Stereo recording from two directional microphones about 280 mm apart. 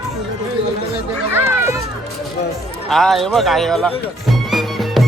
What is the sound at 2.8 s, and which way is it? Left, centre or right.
Speech, centre.